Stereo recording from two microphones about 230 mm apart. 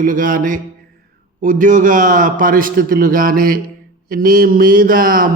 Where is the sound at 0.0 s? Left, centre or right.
Right.